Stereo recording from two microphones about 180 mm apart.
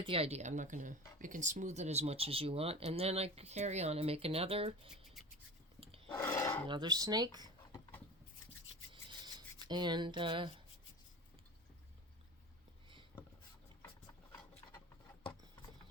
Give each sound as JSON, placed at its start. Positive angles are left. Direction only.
{"t": 0.0, "sound": "speech", "side_deg": -30}
{"t": 6.1, "sound": "speech", "side_deg": 15}
{"t": 6.7, "sound": "speech", "side_deg": -25}
{"t": 8.9, "sound": "rub", "side_deg": -25}